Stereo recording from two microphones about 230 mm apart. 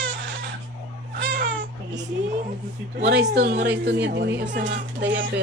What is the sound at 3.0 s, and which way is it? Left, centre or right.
A woman's voice, right.